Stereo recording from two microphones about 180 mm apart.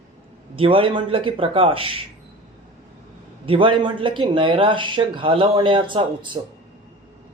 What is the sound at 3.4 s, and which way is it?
Speech, 30° right (ahead or behind).